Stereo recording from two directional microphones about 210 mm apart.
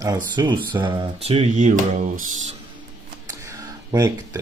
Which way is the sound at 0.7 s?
25° right (ahead or behind).